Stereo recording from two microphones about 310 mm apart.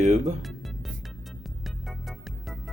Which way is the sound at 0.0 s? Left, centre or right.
Right.